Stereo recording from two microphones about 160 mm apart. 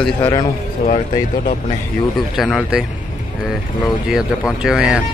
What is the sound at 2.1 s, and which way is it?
Speech, centre (ahead or behind).